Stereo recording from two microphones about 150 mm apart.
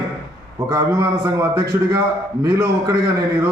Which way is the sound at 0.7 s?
25° right (ahead or behind).